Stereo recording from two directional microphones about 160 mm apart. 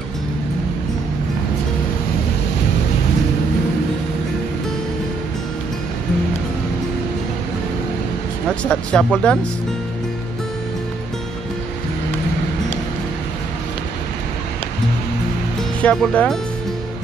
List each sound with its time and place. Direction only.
8.6 s speech: 5° left (ahead or behind)
15.8 s speech: 10° left (ahead or behind)